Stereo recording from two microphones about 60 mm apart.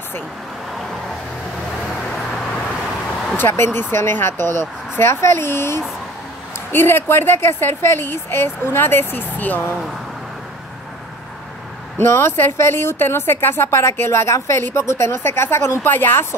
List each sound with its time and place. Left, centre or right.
2.1 s vehicle: centre
3.3 s a woman's voice: left
12.0 s a woman's voice: left